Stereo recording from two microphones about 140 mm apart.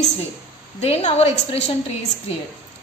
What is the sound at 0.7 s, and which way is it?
Speech, 50° left (ahead or behind).